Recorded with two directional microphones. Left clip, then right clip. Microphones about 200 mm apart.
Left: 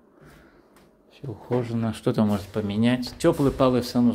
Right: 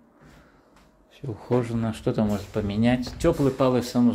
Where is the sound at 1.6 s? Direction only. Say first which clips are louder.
Left 1 dB; 10° left (ahead or behind).